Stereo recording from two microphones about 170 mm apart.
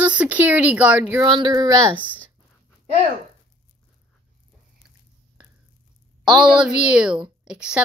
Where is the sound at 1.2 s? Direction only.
25° right (ahead or behind).